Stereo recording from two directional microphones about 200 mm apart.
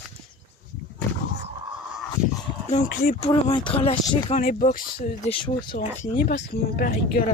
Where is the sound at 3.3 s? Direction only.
25° left (ahead or behind).